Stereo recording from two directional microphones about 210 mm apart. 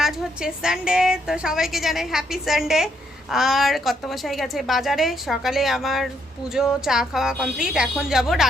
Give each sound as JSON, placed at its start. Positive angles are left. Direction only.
{"t": 0.0, "sound": "a woman's voice", "side_deg": -5}